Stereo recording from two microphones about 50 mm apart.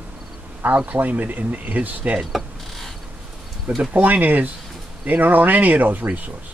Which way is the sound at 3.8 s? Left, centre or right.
Right.